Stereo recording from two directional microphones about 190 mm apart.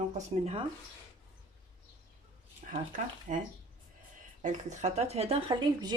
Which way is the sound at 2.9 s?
45° right (ahead or behind).